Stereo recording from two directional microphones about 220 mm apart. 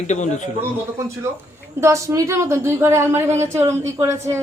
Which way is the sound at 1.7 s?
15° right (ahead or behind).